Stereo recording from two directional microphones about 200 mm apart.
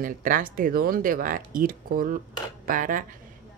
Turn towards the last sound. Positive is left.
turn(degrees=-40)  # may be behind; listen again after turning